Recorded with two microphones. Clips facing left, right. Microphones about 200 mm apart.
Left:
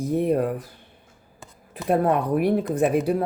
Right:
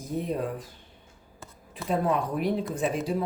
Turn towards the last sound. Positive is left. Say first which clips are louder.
# left 7 dB
turn(degrees=60)  # may be behind; listen again after turning